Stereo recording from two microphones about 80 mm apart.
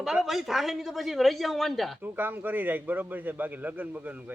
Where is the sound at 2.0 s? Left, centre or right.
Right.